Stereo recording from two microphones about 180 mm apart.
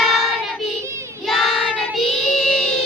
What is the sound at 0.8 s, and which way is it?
Child singing, 15° right (ahead or behind).